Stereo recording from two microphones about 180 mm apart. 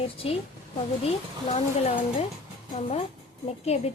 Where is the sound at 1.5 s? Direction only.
40° left (ahead or behind).